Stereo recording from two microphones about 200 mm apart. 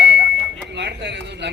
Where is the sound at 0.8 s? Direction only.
60° right (ahead or behind).